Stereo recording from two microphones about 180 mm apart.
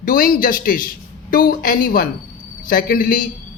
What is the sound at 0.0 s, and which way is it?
A woman's voice, 50° left (ahead or behind).